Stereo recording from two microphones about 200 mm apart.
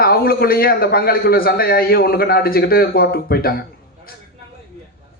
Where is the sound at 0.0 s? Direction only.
50° left (ahead or behind).